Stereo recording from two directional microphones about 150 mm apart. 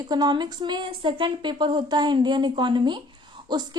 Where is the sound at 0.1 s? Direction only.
30° right (ahead or behind).